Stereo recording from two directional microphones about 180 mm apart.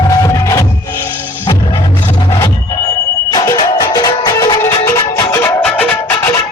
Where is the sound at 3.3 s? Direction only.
20° left (ahead or behind).